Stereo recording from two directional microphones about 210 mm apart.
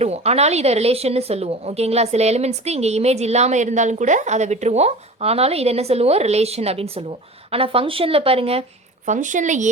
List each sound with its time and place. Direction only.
0.0 s a woman's voice: 30° right (ahead or behind)